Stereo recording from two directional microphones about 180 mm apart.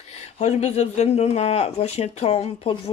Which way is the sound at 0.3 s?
40° left (ahead or behind).